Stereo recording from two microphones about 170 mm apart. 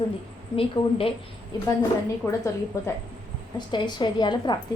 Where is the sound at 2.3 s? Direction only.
20° left (ahead or behind).